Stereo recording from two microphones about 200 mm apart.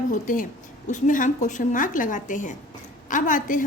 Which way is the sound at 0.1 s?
40° left (ahead or behind).